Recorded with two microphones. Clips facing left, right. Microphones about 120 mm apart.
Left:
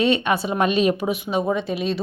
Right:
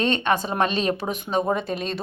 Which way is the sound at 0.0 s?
5° left (ahead or behind).